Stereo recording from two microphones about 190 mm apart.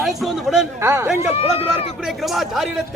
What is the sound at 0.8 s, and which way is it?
Speech, 15° right (ahead or behind).